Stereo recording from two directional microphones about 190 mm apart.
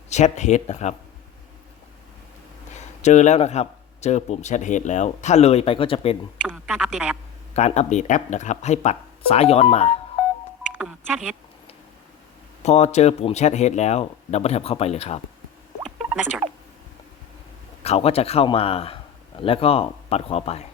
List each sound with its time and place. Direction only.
0.1 s a man's voice: 35° left (ahead or behind)
2.7 s a man's voice: 40° left (ahead or behind)
6.7 s a woman's voice: 5° right (ahead or behind)
7.5 s a man's voice: 35° left (ahead or behind)
10.8 s speech: 5° right (ahead or behind)
12.6 s a man's voice: 35° left (ahead or behind)
17.8 s a man's voice: 35° left (ahead or behind)